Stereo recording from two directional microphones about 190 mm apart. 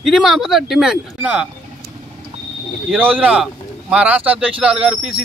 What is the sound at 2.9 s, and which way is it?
A man's voice, 10° right (ahead or behind).